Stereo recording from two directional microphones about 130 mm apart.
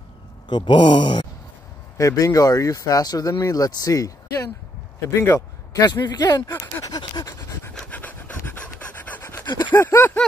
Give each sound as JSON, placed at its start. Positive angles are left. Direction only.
{"t": 0.5, "sound": "speech", "side_deg": 35}
{"t": 2.0, "sound": "speech", "side_deg": 25}
{"t": 6.5, "sound": "pant", "side_deg": 20}
{"t": 7.7, "sound": "pant", "side_deg": 10}
{"t": 9.4, "sound": "a sound", "side_deg": 35}
{"t": 9.7, "sound": "a sound", "side_deg": 20}